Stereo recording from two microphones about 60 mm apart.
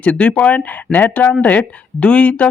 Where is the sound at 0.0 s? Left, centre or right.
Centre.